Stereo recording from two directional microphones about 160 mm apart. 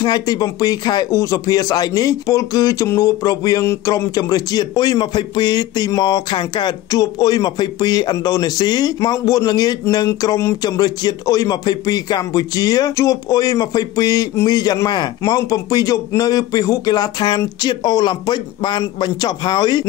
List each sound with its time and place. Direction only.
0.0 s a man's voice: 25° left (ahead or behind)